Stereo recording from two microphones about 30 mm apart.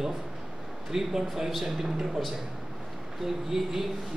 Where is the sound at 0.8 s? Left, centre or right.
Centre.